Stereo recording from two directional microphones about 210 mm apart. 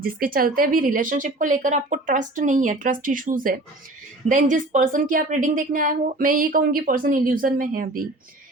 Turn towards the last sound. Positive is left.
turn(degrees=-40)  # may be behind; listen again after turning